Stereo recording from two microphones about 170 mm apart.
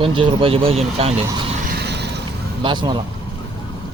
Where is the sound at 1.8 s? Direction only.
80° right.